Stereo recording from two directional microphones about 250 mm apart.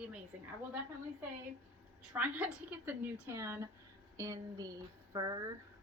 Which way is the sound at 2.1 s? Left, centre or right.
Centre.